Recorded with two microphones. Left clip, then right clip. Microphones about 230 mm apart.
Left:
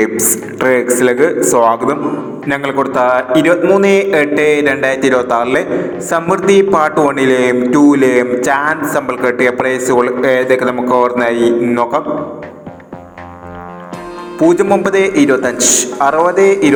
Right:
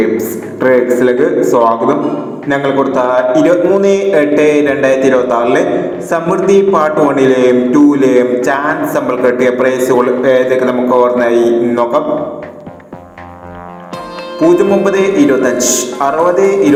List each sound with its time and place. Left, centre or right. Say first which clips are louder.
0.2 s mantra: even; left
14.4 s mantra: right 1 dB; left